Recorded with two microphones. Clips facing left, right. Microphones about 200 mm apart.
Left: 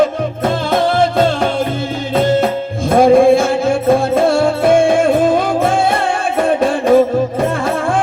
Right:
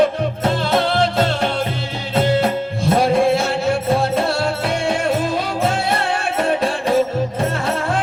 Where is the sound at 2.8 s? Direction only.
50° left (ahead or behind).